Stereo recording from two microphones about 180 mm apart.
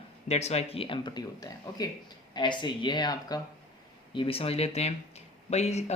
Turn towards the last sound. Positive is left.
turn(degrees=40)  # may be behind; listen again after turning